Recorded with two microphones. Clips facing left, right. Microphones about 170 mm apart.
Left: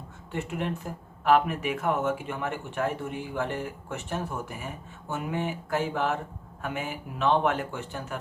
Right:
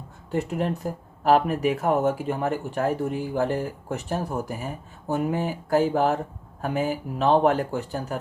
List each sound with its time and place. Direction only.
0.3 s speech: 35° right (ahead or behind)